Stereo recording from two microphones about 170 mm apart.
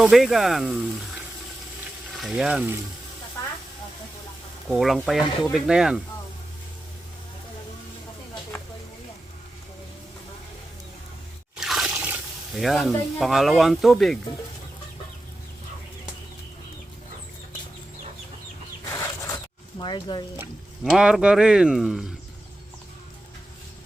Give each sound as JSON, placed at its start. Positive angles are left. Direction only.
{"t": 0.0, "sound": "speech", "side_deg": 0}
{"t": 2.1, "sound": "speech", "side_deg": 0}
{"t": 4.7, "sound": "speech", "side_deg": 0}
{"t": 11.5, "sound": "speech", "side_deg": 0}
{"t": 18.9, "sound": "zipper", "side_deg": 20}
{"t": 19.8, "sound": "speech", "side_deg": 25}
{"t": 20.9, "sound": "speech", "side_deg": -5}